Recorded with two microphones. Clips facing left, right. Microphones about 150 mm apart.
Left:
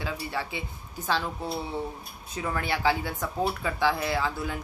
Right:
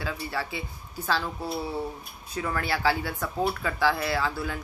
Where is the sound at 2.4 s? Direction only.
20° left (ahead or behind).